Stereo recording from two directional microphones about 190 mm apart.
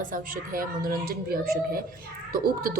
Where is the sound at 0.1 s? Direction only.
45° right (ahead or behind).